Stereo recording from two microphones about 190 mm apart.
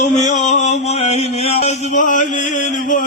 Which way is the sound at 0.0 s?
40° left (ahead or behind).